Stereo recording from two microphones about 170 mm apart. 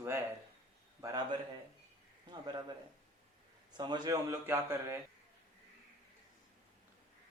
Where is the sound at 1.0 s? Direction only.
25° right (ahead or behind).